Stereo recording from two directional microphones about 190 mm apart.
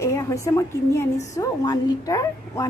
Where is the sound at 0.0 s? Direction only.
15° left (ahead or behind).